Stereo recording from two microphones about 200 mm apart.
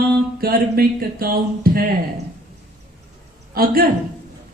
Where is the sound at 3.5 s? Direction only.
45° right (ahead or behind).